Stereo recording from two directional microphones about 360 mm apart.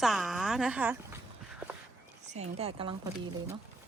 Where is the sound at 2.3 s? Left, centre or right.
Centre.